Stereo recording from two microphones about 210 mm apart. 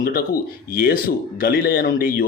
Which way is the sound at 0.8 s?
45° left (ahead or behind).